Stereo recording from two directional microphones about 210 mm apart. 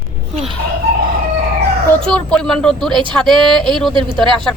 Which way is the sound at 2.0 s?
5° left (ahead or behind).